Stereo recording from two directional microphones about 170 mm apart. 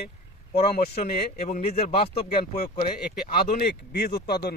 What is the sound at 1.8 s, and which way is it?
Speech, 35° left (ahead or behind).